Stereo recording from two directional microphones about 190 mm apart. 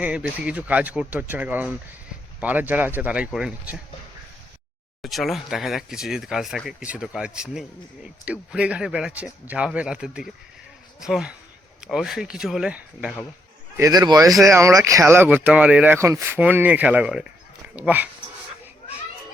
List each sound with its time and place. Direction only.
0.0 s speech: 5° right (ahead or behind)
5.0 s speech: centre (ahead or behind)
13.7 s a man's voice: 20° right (ahead or behind)